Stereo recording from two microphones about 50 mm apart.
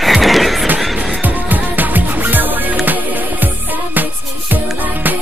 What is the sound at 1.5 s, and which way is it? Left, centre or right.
Music, right.